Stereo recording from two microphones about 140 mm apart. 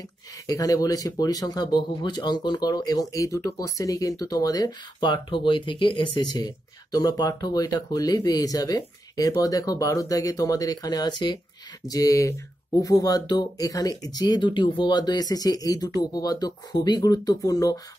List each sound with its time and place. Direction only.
0.5 s speech: 25° left (ahead or behind)